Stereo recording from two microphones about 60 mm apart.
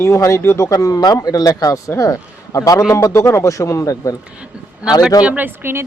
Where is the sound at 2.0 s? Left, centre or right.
Left.